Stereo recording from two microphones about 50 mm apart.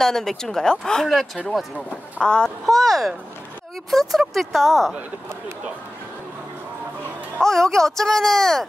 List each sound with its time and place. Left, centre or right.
0.0 s speech: centre
1.0 s speech: centre
2.2 s speech: centre
2.6 s speech: centre
7.3 s speech: centre